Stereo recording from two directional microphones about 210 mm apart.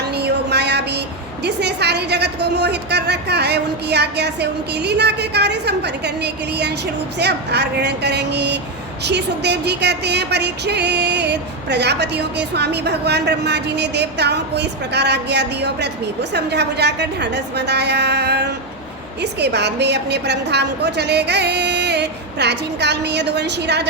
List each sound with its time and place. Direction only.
0.1 s a woman's voice: 50° right (ahead or behind)
7.2 s music: 55° right (ahead or behind)